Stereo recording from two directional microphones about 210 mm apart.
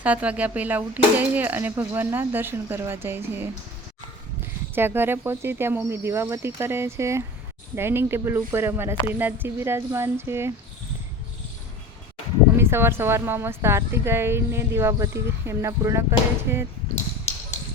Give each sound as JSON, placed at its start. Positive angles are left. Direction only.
{"t": 0.0, "sound": "a woman's voice", "side_deg": -5}
{"t": 4.7, "sound": "a woman's voice", "side_deg": -10}
{"t": 12.5, "sound": "a woman's voice", "side_deg": -10}
{"t": 16.9, "sound": "basketball bounce", "side_deg": 30}